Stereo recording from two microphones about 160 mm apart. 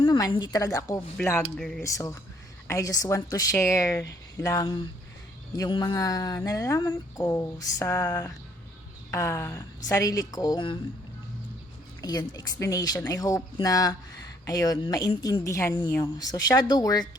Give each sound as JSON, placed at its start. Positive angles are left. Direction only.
{"t": 0.0, "sound": "speech", "side_deg": 30}
{"t": 1.1, "sound": "speech", "side_deg": 10}
{"t": 1.8, "sound": "speech", "side_deg": 20}
{"t": 12.0, "sound": "speech", "side_deg": 25}